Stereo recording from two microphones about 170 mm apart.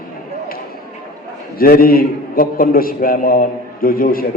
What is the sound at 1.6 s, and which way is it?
A man's voice, 60° left (ahead or behind).